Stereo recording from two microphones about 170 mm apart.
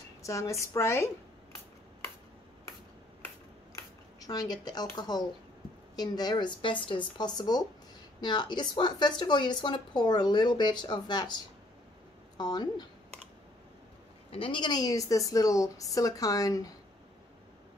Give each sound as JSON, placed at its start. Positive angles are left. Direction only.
{"t": 0.2, "sound": "speech", "side_deg": 20}
{"t": 3.7, "sound": "a woman's voice", "side_deg": 20}
{"t": 12.4, "sound": "a woman's voice", "side_deg": 25}
{"t": 14.3, "sound": "a woman's voice", "side_deg": 30}